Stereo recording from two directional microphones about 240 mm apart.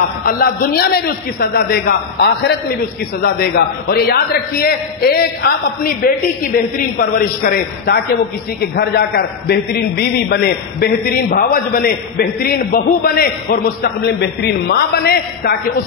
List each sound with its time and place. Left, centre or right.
0.2 s a man's voice: left